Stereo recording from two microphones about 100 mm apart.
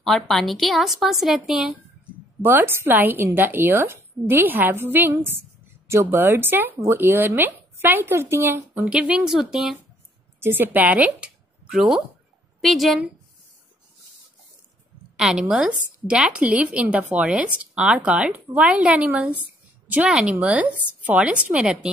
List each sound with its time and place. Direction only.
0.0 s a woman's voice: centre (ahead or behind)
2.4 s speech: 25° right (ahead or behind)
8.8 s a woman's voice: 10° right (ahead or behind)
10.4 s a woman's voice: 20° right (ahead or behind); by 13.0 s centre (ahead or behind)
15.1 s a woman's voice: 5° right (ahead or behind)
20.3 s a woman's voice: 15° right (ahead or behind)